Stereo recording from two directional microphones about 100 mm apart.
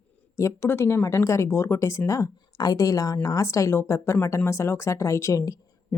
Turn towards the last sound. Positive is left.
turn(degrees=35)  # may be behind; listen again after turning